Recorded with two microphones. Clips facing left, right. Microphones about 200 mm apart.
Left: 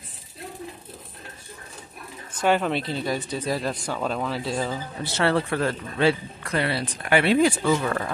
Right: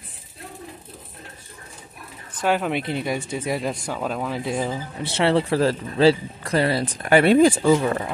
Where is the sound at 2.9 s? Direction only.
20° right (ahead or behind).